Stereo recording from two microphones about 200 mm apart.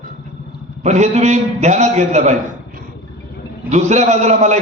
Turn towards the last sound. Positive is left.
turn(degrees=-35)  # may be behind; listen again after turning